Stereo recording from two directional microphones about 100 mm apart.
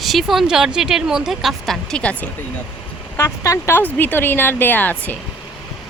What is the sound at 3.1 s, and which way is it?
Speech, 30° left (ahead or behind).